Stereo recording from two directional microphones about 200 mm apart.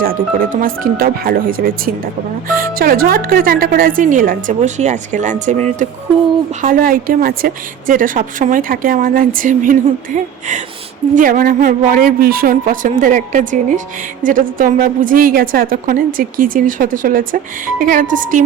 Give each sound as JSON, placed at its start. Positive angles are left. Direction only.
{"t": 0.0, "sound": "a woman's voice", "side_deg": -45}